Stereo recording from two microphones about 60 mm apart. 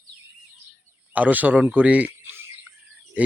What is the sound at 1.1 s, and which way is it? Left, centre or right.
A man's voice, right.